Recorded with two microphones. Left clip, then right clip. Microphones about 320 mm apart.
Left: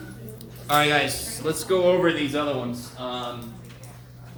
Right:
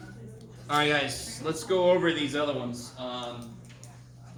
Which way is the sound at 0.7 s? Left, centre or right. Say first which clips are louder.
Left 5 dB; centre.